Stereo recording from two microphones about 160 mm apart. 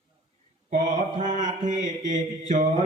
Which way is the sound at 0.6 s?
50° right (ahead or behind).